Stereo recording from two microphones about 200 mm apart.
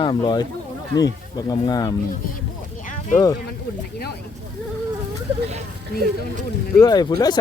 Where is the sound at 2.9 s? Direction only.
40° left (ahead or behind).